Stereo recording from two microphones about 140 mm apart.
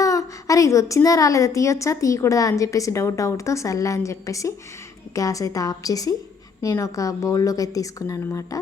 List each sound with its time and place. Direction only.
0.0 s a woman's voice: 25° left (ahead or behind)